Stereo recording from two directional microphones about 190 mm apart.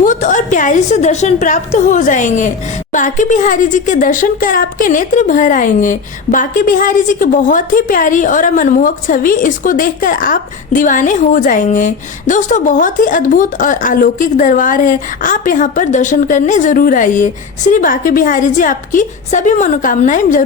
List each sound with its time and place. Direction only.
0.0 s a woman's voice: 40° left (ahead or behind)